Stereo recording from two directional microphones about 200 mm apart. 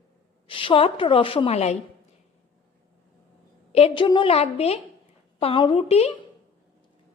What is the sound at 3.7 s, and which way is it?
A woman's voice, 30° left (ahead or behind).